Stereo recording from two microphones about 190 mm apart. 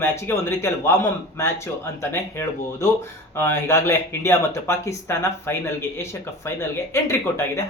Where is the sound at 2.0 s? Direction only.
15° left (ahead or behind).